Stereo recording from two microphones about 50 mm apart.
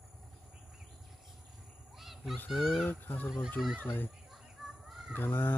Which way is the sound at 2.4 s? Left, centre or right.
Centre.